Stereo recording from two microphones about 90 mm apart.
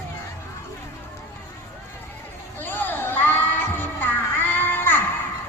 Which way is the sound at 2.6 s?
20° left (ahead or behind).